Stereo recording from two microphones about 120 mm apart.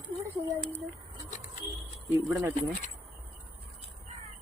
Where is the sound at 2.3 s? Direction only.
20° right (ahead or behind).